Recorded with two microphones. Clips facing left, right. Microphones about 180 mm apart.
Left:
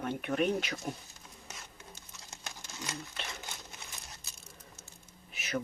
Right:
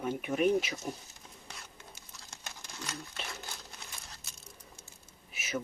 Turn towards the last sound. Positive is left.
turn(degrees=-5)  # may be behind; listen again after turning